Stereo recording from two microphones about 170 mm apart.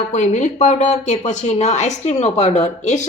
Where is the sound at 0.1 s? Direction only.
45° left (ahead or behind).